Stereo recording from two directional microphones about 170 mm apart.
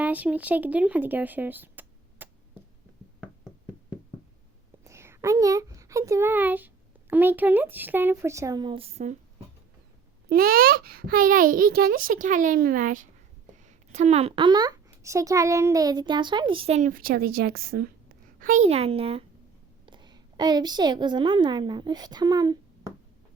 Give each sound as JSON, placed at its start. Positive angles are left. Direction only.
{"t": 0.0, "sound": "speech", "side_deg": -10}
{"t": 4.8, "sound": "a sound", "side_deg": -15}
{"t": 7.1, "sound": "speech", "side_deg": -10}
{"t": 10.2, "sound": "a child's voice", "side_deg": -60}
{"t": 18.3, "sound": "a woman's voice", "side_deg": -50}